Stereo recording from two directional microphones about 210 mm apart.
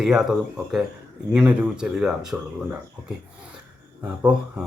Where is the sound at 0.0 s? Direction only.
Centre (ahead or behind).